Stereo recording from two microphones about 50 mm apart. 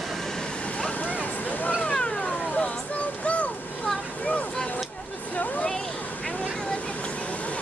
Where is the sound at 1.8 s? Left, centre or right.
Left.